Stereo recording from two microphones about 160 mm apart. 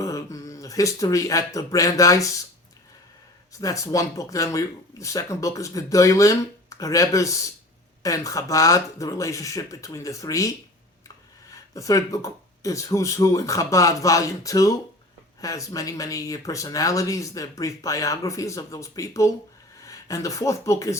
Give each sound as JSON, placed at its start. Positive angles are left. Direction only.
{"t": 0.0, "sound": "speech", "side_deg": 20}
{"t": 3.6, "sound": "speech", "side_deg": 20}
{"t": 11.5, "sound": "speech", "side_deg": 20}